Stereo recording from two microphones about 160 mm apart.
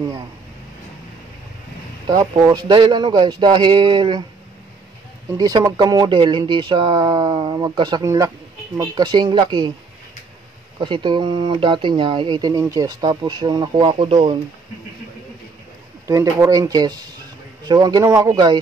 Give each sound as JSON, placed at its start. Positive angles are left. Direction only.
{"t": 2.0, "sound": "speech", "side_deg": -25}
{"t": 5.4, "sound": "speech", "side_deg": -25}
{"t": 10.8, "sound": "speech", "side_deg": -30}
{"t": 16.1, "sound": "speech", "side_deg": -20}